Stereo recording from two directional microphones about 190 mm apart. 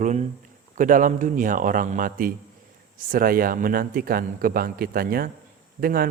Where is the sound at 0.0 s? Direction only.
40° right (ahead or behind).